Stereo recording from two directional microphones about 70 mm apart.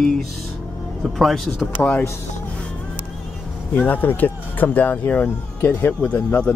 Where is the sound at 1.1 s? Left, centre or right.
Centre.